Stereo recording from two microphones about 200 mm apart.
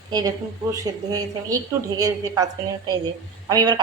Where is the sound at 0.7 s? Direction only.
20° right (ahead or behind).